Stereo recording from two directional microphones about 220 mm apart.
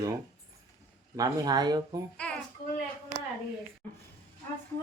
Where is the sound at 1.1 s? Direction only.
15° right (ahead or behind).